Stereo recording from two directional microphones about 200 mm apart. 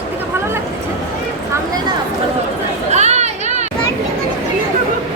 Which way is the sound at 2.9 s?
35° right (ahead or behind).